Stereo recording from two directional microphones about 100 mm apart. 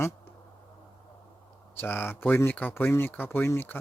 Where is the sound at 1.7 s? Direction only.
20° left (ahead or behind).